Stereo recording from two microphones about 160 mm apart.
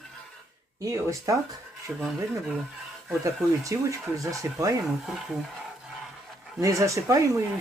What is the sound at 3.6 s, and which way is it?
Speech, 20° right (ahead or behind).